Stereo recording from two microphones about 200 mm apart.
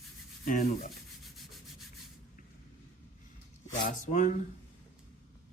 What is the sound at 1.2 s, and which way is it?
Rub, centre (ahead or behind).